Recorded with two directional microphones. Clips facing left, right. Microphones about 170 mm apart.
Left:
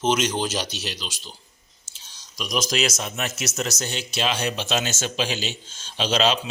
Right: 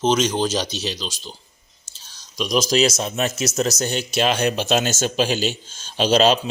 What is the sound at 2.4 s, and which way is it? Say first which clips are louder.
A man's voice: right 6 dB; 30° right (ahead or behind).